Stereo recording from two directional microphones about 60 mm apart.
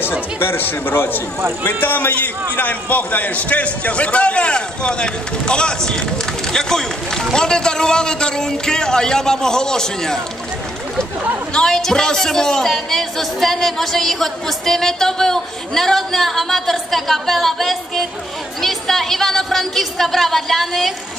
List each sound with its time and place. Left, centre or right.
0.4 s a man's voice: left; by 10.2 s centre
11.5 s a man's voice: centre